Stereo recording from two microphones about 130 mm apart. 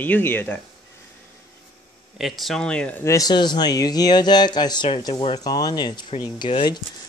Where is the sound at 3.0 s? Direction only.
25° left (ahead or behind).